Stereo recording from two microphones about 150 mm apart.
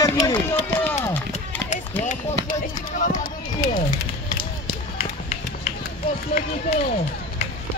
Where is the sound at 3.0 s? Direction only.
60° left (ahead or behind).